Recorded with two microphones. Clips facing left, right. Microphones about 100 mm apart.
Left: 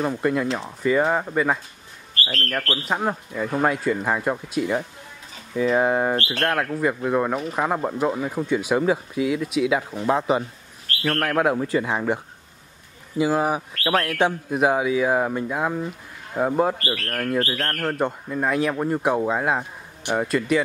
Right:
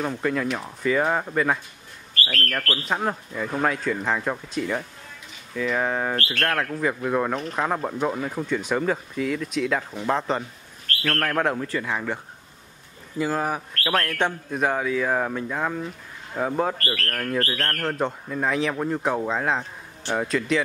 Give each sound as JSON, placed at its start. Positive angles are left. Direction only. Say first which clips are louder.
{"t": 0.0, "sound": "speech", "louder": "left 3 dB", "side_deg": 5}
{"t": 2.1, "sound": "speech", "louder": "even", "side_deg": 25}
{"t": 2.8, "sound": "speech", "louder": "left 1 dB", "side_deg": 5}
{"t": 6.4, "sound": "speech", "louder": "left 2 dB", "side_deg": 5}
{"t": 13.2, "sound": "speech", "louder": "left 4 dB", "side_deg": 10}
{"t": 20.2, "sound": "speech", "louder": "left 2 dB", "side_deg": 5}